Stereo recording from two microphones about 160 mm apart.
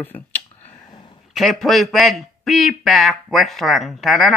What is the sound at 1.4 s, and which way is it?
A man's voice, centre (ahead or behind).